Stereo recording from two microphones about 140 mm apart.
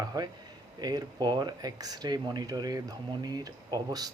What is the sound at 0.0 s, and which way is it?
Speech, 25° right (ahead or behind).